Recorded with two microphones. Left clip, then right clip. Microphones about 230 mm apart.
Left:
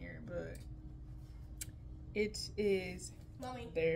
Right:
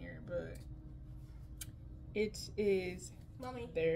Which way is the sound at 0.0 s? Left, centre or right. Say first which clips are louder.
Right 2 dB; centre.